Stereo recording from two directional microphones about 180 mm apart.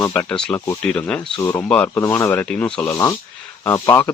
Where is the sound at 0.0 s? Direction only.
15° left (ahead or behind).